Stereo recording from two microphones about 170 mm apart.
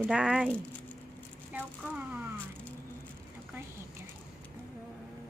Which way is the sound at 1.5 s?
10° right (ahead or behind).